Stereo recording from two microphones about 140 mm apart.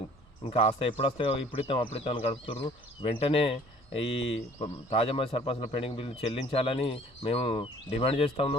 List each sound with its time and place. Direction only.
0.4 s speech: 40° left (ahead or behind)